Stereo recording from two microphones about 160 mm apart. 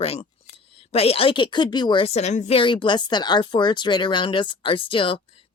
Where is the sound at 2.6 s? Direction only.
30° left (ahead or behind).